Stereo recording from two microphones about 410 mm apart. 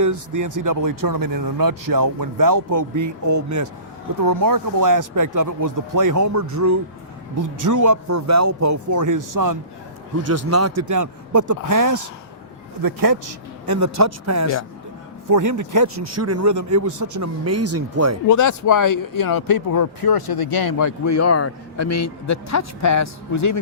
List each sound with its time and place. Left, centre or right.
0.0 s speech: right
10.2 s a man's voice: right
18.3 s speech: left